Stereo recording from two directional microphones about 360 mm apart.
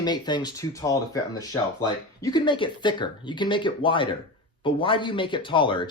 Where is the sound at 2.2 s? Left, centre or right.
Centre.